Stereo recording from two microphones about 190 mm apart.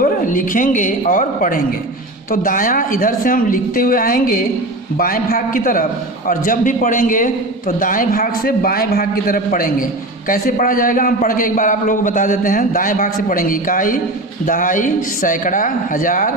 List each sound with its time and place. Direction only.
0.0 s a man's voice: 45° left (ahead or behind)